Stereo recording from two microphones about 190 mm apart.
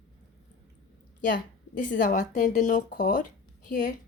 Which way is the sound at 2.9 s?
60° left (ahead or behind).